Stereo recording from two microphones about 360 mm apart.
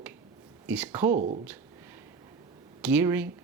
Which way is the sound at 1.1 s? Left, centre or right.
Centre.